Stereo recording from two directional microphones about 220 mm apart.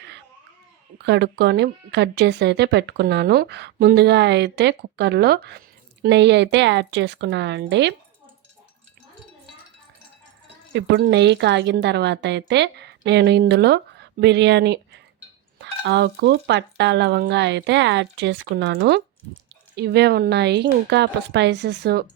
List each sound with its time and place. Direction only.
0.0 s a sound: 50° right (ahead or behind)
0.9 s speech: 50° right (ahead or behind)
10.7 s speech: 55° right (ahead or behind)